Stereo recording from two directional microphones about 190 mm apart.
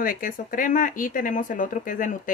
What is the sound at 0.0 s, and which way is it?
Speech, 45° left (ahead or behind).